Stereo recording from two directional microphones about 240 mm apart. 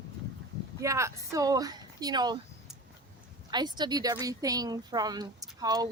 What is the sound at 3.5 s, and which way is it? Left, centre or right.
A woman's voice, centre.